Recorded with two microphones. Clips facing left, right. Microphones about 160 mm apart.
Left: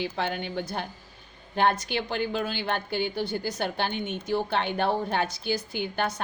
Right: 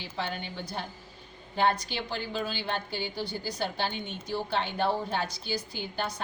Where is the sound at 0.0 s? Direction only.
60° left (ahead or behind).